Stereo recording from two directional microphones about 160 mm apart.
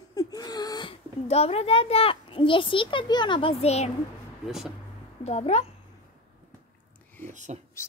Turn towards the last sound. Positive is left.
turn(degrees=-50)  # may be behind; listen again after turning